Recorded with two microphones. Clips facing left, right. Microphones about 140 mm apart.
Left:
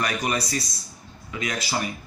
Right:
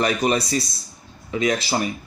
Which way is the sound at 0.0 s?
25° right (ahead or behind).